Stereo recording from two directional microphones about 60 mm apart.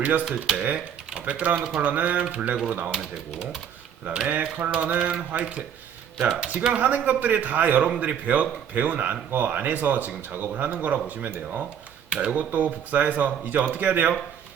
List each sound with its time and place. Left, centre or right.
0.0 s speech: right
4.0 s speech: centre